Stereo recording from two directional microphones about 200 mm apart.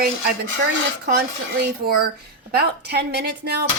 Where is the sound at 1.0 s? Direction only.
50° right (ahead or behind).